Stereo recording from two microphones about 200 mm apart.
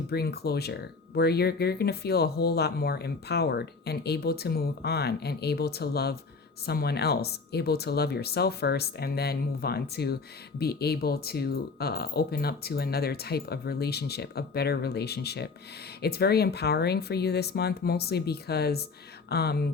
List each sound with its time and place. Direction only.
0.1 s speech: 55° left (ahead or behind)